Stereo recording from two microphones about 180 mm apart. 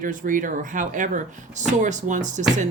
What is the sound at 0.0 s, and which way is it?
Speech, 45° right (ahead or behind).